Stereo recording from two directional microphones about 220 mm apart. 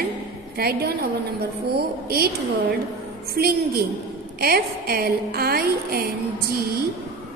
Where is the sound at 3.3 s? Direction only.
45° right (ahead or behind).